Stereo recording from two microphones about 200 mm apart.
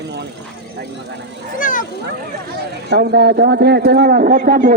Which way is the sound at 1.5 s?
40° left (ahead or behind).